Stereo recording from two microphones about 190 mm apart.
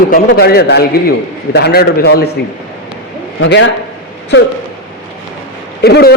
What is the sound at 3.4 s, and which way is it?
Speech, 85° left.